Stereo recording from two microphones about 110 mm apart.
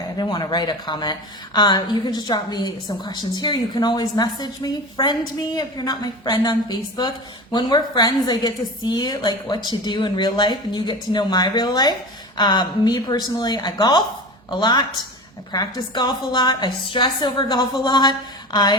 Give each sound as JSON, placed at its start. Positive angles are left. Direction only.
{"t": 0.2, "sound": "speech", "side_deg": 40}